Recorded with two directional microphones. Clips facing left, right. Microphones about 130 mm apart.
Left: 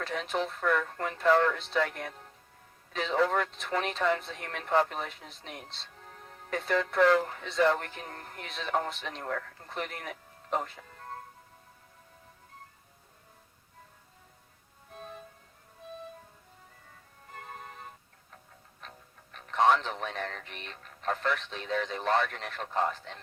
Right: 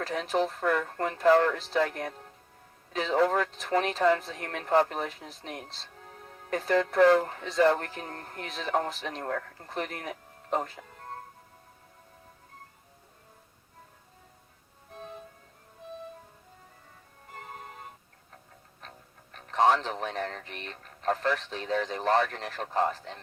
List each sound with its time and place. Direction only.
0.0 s speech: 35° right (ahead or behind)
19.3 s speech: 35° right (ahead or behind)